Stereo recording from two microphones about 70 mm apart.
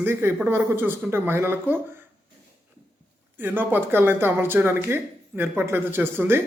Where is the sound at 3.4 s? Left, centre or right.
Right.